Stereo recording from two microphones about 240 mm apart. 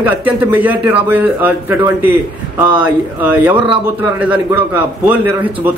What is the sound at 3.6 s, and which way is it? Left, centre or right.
Speech, right.